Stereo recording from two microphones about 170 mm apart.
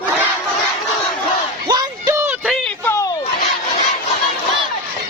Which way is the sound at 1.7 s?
15° right (ahead or behind).